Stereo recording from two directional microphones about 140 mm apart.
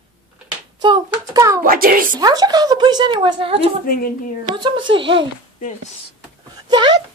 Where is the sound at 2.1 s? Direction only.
30° right (ahead or behind).